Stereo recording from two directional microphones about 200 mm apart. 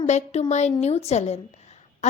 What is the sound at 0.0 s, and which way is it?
A woman's voice, 35° left (ahead or behind).